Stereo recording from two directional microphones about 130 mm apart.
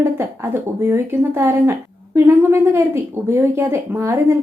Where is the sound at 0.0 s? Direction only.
20° right (ahead or behind).